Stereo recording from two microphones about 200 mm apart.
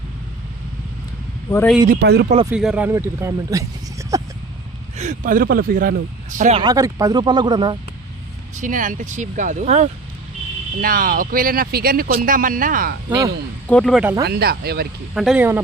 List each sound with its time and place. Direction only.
1.5 s speech: 15° left (ahead or behind)
1.9 s speech: 55° right (ahead or behind)
2.5 s speech: 5° right (ahead or behind)
4.9 s speech: 40° right (ahead or behind)
6.6 s speech: 20° right (ahead or behind)
8.5 s speech: 40° right (ahead or behind)
10.8 s speech: 45° right (ahead or behind)
13.7 s speech: 5° left (ahead or behind)
14.0 s speech: 10° right (ahead or behind)
14.3 s speech: 55° right (ahead or behind)
15.1 s speech: centre (ahead or behind)